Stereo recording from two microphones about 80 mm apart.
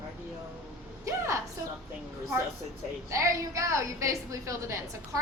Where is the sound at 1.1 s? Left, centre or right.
Right.